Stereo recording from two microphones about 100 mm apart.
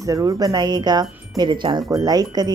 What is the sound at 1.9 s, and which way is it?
Speech, 40° right (ahead or behind).